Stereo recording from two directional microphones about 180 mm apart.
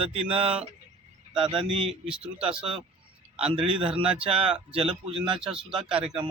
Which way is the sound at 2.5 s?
30° right (ahead or behind).